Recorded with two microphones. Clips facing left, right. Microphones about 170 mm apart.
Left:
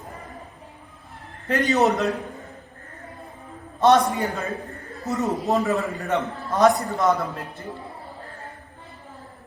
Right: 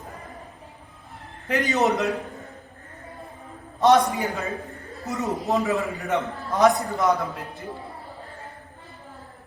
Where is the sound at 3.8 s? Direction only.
Centre (ahead or behind).